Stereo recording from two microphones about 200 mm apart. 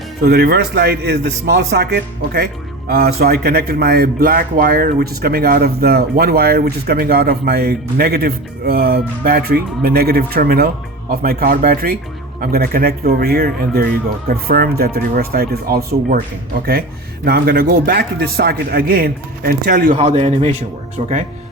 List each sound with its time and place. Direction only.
0.2 s speech: 50° right (ahead or behind)
17.2 s speech: 50° right (ahead or behind); by 20.6 s 30° right (ahead or behind)